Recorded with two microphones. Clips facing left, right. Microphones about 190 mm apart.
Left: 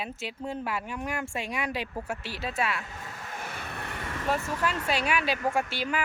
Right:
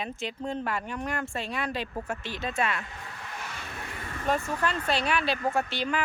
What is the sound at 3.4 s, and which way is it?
Vehicle, 55° left (ahead or behind).